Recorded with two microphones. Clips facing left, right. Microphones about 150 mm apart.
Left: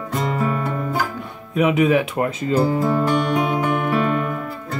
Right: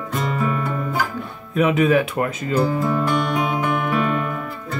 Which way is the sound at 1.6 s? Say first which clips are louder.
Even; 15° left (ahead or behind).